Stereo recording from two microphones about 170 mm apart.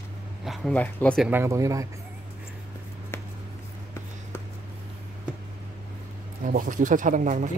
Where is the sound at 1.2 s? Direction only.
15° right (ahead or behind).